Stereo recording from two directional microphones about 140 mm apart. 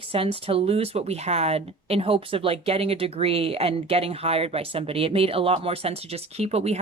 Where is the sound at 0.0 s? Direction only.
40° right (ahead or behind).